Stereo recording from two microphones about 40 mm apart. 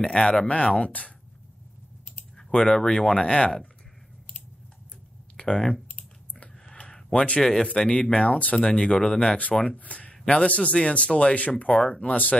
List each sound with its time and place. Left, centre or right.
0.0 s speech: centre
2.3 s speech: centre
3.2 s speech: left
5.4 s speech: centre
6.6 s a sound: left
7.2 s speech: left
8.3 s speech: left
8.5 s speech: left
9.8 s speech: left
10.2 s a man's voice: left